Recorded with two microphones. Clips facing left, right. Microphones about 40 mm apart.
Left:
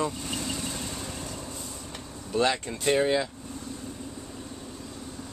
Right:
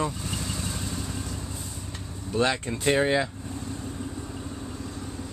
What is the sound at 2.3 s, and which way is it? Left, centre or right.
Speech, centre.